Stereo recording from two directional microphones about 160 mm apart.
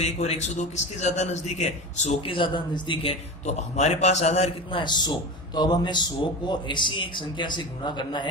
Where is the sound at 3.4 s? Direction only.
45° left (ahead or behind).